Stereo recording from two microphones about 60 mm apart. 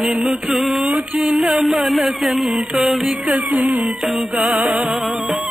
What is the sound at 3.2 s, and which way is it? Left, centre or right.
Music, right.